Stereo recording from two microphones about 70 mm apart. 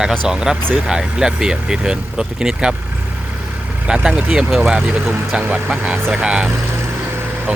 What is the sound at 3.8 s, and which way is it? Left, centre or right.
Speech, centre.